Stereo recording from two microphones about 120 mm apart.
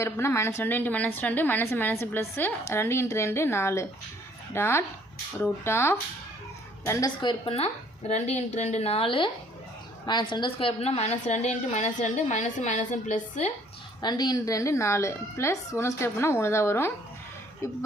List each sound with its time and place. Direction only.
0.0 s a woman's voice: 25° left (ahead or behind)
7.2 s a woman's voice: 45° left (ahead or behind); by 13.5 s 90° left
14.0 s a woman's voice: 35° left (ahead or behind)